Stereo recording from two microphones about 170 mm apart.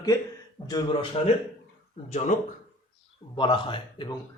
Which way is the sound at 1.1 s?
40° left (ahead or behind).